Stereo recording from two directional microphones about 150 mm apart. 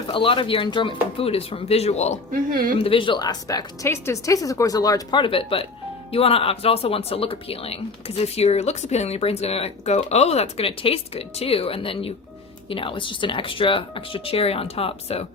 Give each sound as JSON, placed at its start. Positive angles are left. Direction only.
{"t": 0.1, "sound": "speech", "side_deg": 35}
{"t": 2.5, "sound": "speech", "side_deg": -70}
{"t": 2.7, "sound": "speech", "side_deg": 40}
{"t": 5.2, "sound": "speech", "side_deg": 35}